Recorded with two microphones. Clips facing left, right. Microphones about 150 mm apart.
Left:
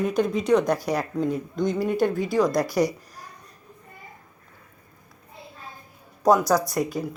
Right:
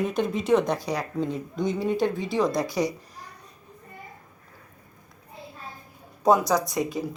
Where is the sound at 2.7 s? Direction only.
20° right (ahead or behind).